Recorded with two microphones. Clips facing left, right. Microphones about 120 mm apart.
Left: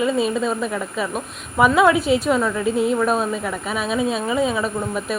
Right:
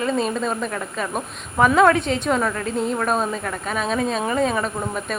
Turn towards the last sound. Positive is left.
turn(degrees=5)  # may be behind; listen again after turning